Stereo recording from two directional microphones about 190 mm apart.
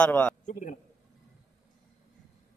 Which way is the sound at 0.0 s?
10° left (ahead or behind).